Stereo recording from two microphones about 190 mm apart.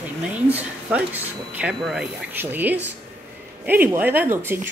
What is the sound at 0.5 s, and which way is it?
Speech, 10° right (ahead or behind).